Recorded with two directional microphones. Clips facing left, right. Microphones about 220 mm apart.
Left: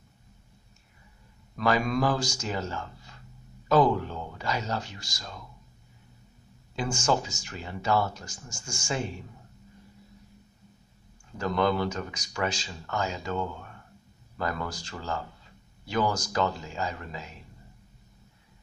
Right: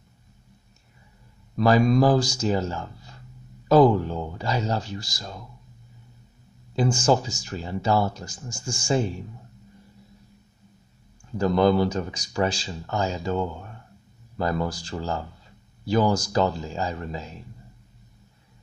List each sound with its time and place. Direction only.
1.6 s speech: 35° right (ahead or behind)
6.7 s speech: 35° right (ahead or behind)
11.3 s speech: 35° right (ahead or behind)